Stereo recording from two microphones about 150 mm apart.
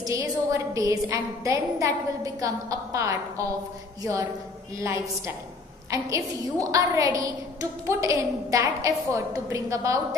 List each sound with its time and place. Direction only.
0.0 s a woman's voice: 20° right (ahead or behind)